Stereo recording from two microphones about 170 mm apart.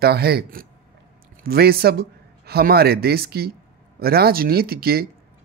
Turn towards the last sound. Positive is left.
turn(degrees=-65)  # may be behind; listen again after turning